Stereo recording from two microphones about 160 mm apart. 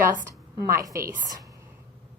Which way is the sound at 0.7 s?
20° right (ahead or behind).